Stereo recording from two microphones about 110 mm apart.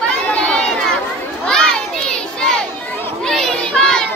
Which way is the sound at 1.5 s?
5° left (ahead or behind).